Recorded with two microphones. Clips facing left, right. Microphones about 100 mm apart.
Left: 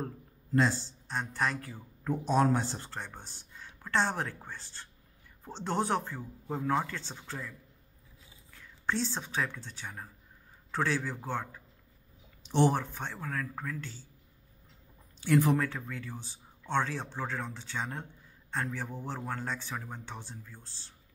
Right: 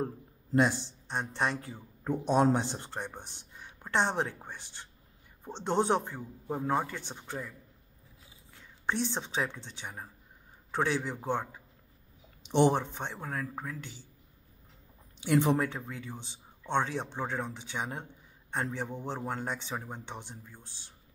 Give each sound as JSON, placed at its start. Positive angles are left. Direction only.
{"t": 0.0, "sound": "speech", "side_deg": -20}
{"t": 15.1, "sound": "speech", "side_deg": -20}